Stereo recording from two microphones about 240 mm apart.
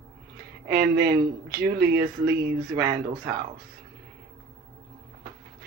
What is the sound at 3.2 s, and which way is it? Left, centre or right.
Speech, right.